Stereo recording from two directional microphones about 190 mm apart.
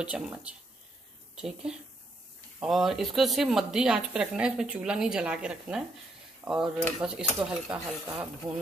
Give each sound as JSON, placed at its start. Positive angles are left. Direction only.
{"t": 0.0, "sound": "speech", "side_deg": -5}